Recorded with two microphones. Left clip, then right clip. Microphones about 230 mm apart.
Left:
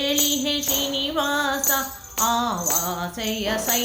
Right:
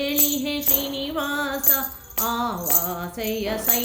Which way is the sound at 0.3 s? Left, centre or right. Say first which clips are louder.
Left 3 dB; centre.